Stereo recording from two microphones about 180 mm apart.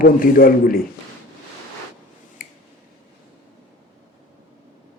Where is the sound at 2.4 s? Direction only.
50° left (ahead or behind).